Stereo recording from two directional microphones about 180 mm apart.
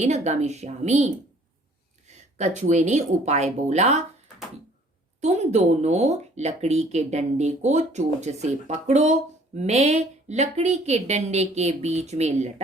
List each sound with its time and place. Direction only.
0.0 s speech: 40° right (ahead or behind)
5.2 s speech: 40° right (ahead or behind)